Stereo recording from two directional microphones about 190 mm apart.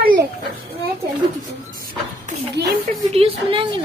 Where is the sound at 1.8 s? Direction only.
50° right (ahead or behind).